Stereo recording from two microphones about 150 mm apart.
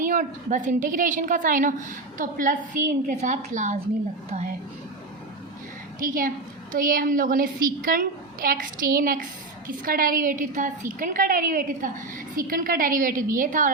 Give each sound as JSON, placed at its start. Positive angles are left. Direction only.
{"t": 0.0, "sound": "a woman's voice", "side_deg": -65}
{"t": 6.0, "sound": "a woman's voice", "side_deg": -65}